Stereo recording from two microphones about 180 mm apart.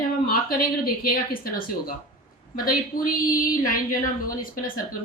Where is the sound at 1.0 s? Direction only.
55° left (ahead or behind).